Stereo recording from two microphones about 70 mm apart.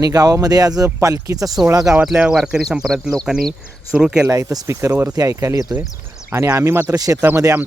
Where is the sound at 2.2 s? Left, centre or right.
Centre.